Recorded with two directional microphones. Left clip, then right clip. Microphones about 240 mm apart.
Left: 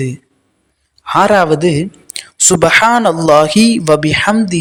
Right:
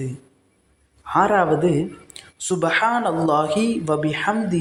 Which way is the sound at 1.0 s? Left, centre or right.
Left.